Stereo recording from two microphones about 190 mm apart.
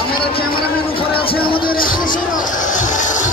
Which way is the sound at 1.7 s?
45° left (ahead or behind).